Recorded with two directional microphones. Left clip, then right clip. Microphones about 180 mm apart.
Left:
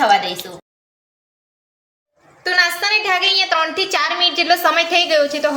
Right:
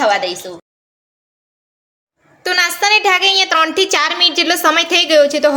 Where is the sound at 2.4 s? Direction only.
65° right (ahead or behind).